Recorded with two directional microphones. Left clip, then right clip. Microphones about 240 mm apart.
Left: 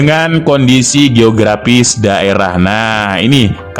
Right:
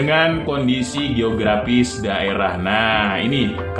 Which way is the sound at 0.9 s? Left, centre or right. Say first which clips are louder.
Left 12 dB; left.